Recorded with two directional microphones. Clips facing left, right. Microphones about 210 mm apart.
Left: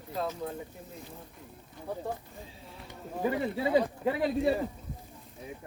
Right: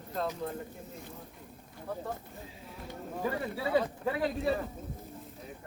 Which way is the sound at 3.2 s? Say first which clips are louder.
Left 4 dB; 15° left (ahead or behind).